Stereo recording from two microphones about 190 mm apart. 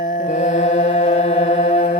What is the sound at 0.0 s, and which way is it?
Mantra, 45° left (ahead or behind).